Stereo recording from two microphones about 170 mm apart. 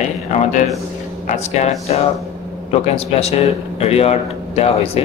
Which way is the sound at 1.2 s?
40° left (ahead or behind).